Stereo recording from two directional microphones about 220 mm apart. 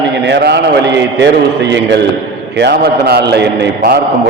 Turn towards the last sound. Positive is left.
turn(degrees=-45)  # may be behind; listen again after turning